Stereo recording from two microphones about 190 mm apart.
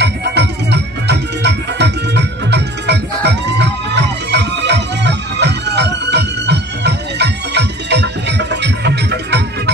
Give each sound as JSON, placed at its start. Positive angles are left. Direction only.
{"t": 0.0, "sound": "music", "side_deg": -60}